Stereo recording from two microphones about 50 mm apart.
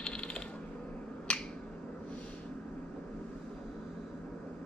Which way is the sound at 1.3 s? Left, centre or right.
Left.